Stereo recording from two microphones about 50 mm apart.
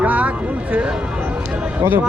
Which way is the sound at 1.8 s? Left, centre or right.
Right.